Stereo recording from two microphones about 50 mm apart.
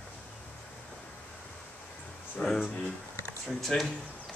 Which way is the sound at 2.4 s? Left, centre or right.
Left.